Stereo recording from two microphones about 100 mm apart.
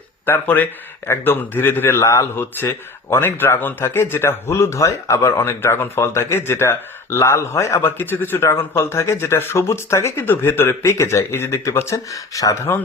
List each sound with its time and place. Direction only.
0.3 s a man's voice: 20° left (ahead or behind); by 12.5 s 35° left (ahead or behind)